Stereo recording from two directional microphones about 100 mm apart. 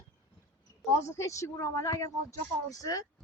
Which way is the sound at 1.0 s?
30° left (ahead or behind).